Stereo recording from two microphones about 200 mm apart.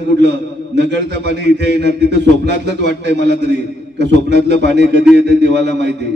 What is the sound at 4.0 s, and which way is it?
Speech, 55° right (ahead or behind).